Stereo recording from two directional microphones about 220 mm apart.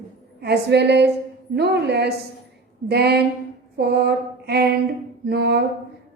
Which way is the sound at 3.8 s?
45° right (ahead or behind).